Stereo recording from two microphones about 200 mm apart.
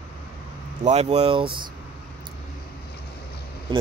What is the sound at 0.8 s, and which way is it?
Speech, 35° right (ahead or behind).